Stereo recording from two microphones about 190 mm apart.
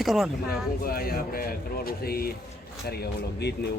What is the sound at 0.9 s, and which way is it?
Speech, 50° left (ahead or behind).